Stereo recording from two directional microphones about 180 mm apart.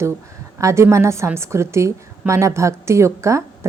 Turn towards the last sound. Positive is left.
turn(degrees=-15)  # may be behind; listen again after turning